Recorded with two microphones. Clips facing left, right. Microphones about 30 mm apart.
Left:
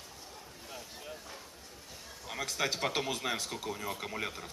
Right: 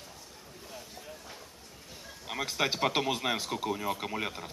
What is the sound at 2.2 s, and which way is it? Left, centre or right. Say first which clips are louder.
Speech: right 3 dB; right.